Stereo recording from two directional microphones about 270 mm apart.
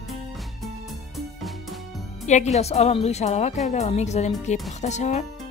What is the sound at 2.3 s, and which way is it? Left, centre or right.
A woman's voice, left.